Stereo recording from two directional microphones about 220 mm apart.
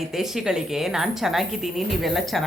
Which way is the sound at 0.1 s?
Centre (ahead or behind).